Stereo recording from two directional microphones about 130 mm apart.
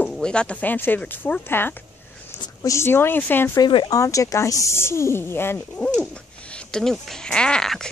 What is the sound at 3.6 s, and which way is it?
Speech, 35° left (ahead or behind).